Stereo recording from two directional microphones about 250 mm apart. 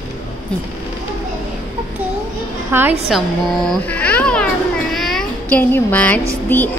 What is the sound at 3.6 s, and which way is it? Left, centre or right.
Cat, centre.